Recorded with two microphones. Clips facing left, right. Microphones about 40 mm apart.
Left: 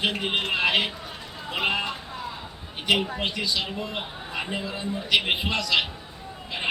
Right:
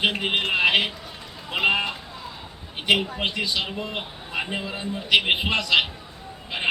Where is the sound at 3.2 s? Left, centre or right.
Right.